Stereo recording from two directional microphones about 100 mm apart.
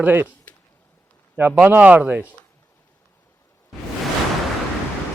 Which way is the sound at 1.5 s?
15° right (ahead or behind).